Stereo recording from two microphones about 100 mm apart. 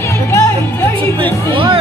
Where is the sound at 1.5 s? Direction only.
60° right (ahead or behind).